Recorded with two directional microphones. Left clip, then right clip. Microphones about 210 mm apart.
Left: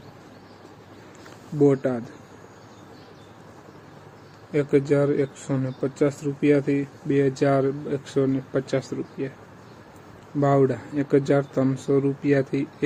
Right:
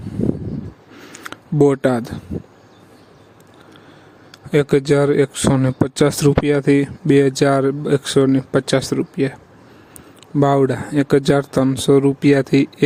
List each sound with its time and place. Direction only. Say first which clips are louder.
1.6 s speech: right 6 dB; 55° right (ahead or behind)
4.5 s speech: right 6 dB; 50° right (ahead or behind)
10.4 s speech: right 5 dB; 50° right (ahead or behind)